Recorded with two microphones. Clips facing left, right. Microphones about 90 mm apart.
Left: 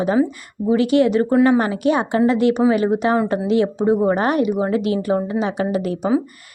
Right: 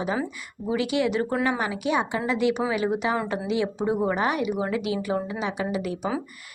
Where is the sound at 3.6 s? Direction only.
30° left (ahead or behind).